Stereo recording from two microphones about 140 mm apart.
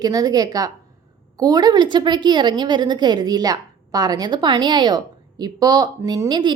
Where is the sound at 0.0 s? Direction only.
25° right (ahead or behind).